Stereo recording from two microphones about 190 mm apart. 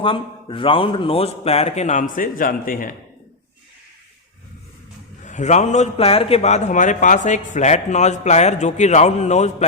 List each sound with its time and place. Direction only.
0.0 s a man's voice: 25° left (ahead or behind); by 2.9 s 45° left (ahead or behind)
5.2 s a man's voice: 40° left (ahead or behind)